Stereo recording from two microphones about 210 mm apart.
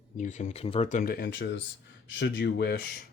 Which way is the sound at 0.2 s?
35° left (ahead or behind).